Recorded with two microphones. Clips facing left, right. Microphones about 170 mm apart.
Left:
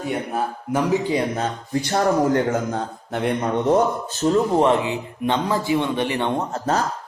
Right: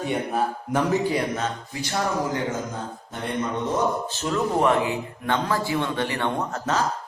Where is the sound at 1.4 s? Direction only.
50° left (ahead or behind); by 3.5 s 65° left (ahead or behind).